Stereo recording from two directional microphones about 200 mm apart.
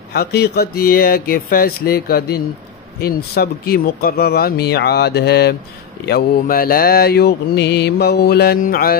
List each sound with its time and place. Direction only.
0.1 s mantra: 50° left (ahead or behind)